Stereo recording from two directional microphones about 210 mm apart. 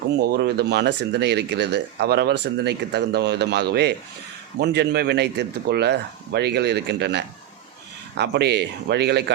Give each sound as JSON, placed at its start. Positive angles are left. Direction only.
{"t": 0.2, "sound": "speech", "side_deg": -50}